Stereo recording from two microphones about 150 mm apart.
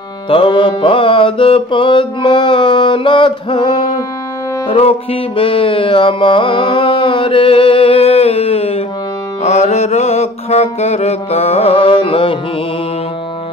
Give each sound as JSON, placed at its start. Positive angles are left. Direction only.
{"t": 0.3, "sound": "music", "side_deg": 35}